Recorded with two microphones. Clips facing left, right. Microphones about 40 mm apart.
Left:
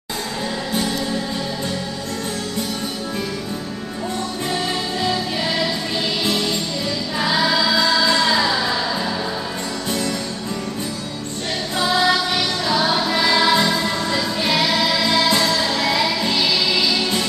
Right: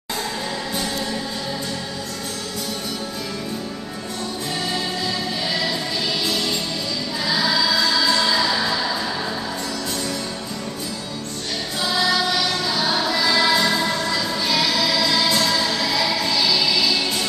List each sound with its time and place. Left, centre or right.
7.2 s music: centre
8.5 s music: centre
11.8 s music: left
12.8 s music: centre
13.1 s music: left
13.7 s music: centre
14.1 s music: left